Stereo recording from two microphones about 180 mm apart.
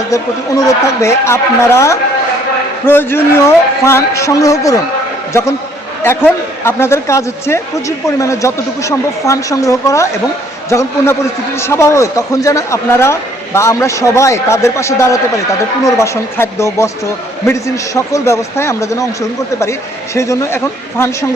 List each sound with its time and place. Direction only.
1.0 s a man's voice: 15° left (ahead or behind)
20.1 s a man's voice: 15° left (ahead or behind)